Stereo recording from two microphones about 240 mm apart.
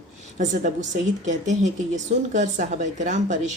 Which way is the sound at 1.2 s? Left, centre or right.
Right.